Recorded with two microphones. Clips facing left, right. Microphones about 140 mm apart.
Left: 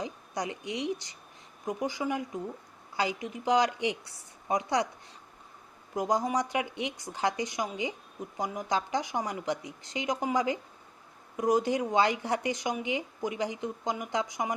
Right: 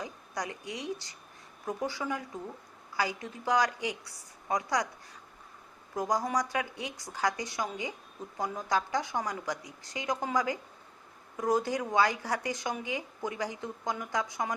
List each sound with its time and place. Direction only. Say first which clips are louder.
0.0 s a woman's voice: left 3 dB; 20° left (ahead or behind)
5.9 s speech: left 2 dB; 20° left (ahead or behind)